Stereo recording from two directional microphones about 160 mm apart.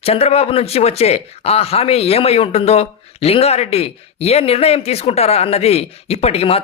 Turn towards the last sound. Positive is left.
turn(degrees=40)  # may be behind; listen again after turning